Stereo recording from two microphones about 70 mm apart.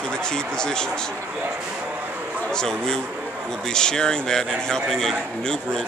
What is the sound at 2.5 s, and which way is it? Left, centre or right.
A man's voice, centre.